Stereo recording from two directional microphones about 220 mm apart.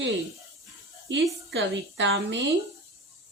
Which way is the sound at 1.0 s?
55° right (ahead or behind).